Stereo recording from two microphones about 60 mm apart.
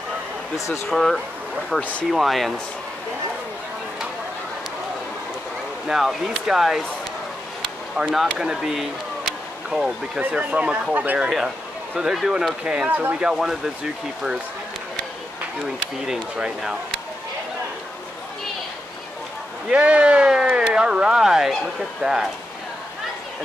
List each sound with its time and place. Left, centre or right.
0.8 s speech: centre
5.9 s speech: centre
8.1 s speech: centre
10.1 s speech: centre
11.1 s speech: centre
16.1 s speech: centre
19.7 s speech: centre